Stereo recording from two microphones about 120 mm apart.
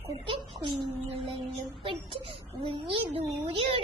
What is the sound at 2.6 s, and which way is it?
Speech, 50° right (ahead or behind).